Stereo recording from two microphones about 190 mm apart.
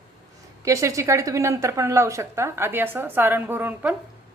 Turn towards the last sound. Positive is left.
turn(degrees=-10)  # may be behind; listen again after turning